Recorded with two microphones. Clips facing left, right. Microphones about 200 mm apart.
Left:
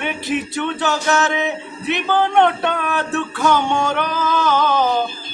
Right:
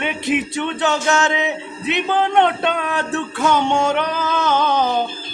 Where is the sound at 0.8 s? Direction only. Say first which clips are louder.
Right 1 dB; 20° right (ahead or behind).